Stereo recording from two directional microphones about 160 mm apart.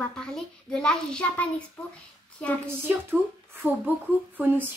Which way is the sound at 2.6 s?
15° right (ahead or behind).